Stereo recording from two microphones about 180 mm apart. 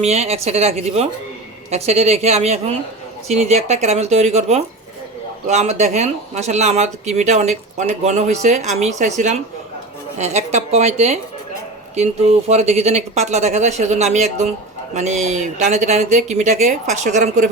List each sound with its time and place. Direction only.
0.0 s speech: 35° right (ahead or behind)